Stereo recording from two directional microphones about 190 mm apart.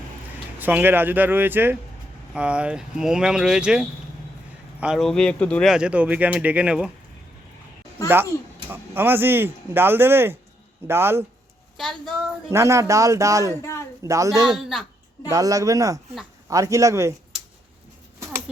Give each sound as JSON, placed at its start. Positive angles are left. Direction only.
{"t": 0.6, "sound": "speech", "side_deg": -10}
{"t": 8.0, "sound": "speech", "side_deg": -10}
{"t": 11.8, "sound": "speech", "side_deg": 0}
{"t": 12.5, "sound": "speech", "side_deg": -15}
{"t": 13.6, "sound": "a sound", "side_deg": 15}
{"t": 14.0, "sound": "speech", "side_deg": -15}
{"t": 14.4, "sound": "speech", "side_deg": 0}
{"t": 15.3, "sound": "speech", "side_deg": -20}